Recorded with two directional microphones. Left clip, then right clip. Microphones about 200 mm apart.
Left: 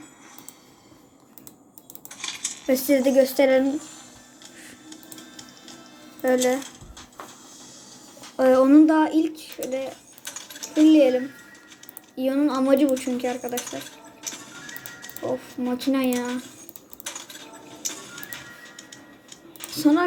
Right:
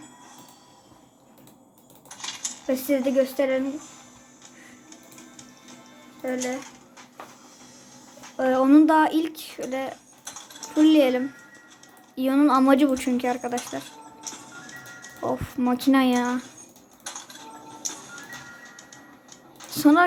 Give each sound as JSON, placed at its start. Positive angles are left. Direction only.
{"t": 2.0, "sound": "cutlery", "side_deg": 20}
{"t": 2.7, "sound": "speech", "side_deg": 10}
{"t": 6.2, "sound": "a sound", "side_deg": 30}
{"t": 8.4, "sound": "a woman's voice", "side_deg": 5}
{"t": 8.6, "sound": "speech", "side_deg": -15}
{"t": 15.2, "sound": "speech", "side_deg": -25}
{"t": 17.7, "sound": "music", "side_deg": 30}
{"t": 19.7, "sound": "speech", "side_deg": -20}